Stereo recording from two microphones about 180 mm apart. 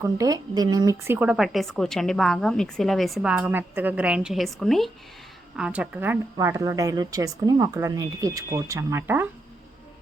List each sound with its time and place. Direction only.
0.0 s speech: 20° right (ahead or behind)